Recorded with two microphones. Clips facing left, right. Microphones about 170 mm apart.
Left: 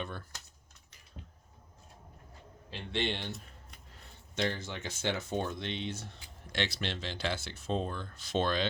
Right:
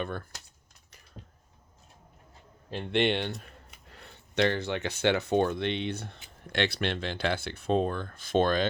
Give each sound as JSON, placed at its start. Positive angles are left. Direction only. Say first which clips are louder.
{"t": 0.0, "sound": "speech", "louder": "right 6 dB", "side_deg": -55}
{"t": 2.6, "sound": "speech", "louder": "right 8 dB", "side_deg": -55}